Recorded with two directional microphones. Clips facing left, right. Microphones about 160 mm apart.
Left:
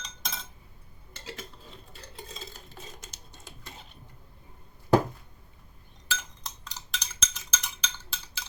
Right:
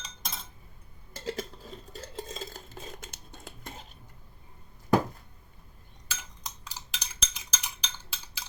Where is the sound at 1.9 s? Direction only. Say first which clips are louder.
Right 6 dB; 45° right (ahead or behind).